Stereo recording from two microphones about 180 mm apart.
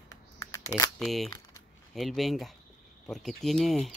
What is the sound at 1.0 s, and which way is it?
Speech, centre (ahead or behind).